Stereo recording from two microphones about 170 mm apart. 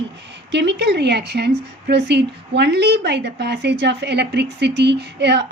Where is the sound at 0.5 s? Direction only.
90° right.